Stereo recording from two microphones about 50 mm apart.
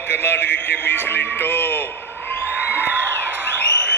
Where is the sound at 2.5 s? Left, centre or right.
Right.